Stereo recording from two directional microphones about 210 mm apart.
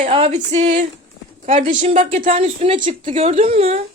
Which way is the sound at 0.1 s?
30° right (ahead or behind).